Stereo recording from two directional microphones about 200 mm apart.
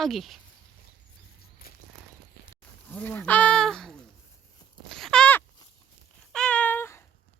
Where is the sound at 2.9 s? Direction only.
10° left (ahead or behind).